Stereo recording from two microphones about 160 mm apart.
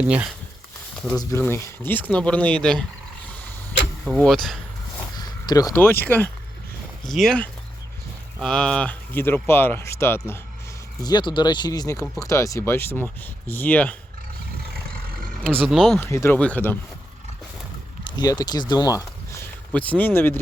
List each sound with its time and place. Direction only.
1.1 s speech: 20° left (ahead or behind)
4.0 s speech: centre (ahead or behind)
5.1 s speech: 25° left (ahead or behind)
7.0 s speech: centre (ahead or behind)
11.0 s speech: 25° left (ahead or behind); by 13.9 s 10° left (ahead or behind)
15.6 s speech: centre (ahead or behind)
16.0 s speech: 15° left (ahead or behind)
18.0 s speech: 25° left (ahead or behind)